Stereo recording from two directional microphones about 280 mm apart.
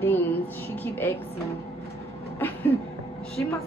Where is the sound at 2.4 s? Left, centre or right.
Centre.